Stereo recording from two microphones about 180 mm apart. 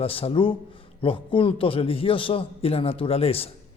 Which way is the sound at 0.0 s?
30° left (ahead or behind).